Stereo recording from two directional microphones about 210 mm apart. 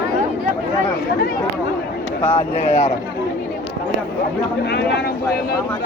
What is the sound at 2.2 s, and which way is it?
Speech, 25° left (ahead or behind).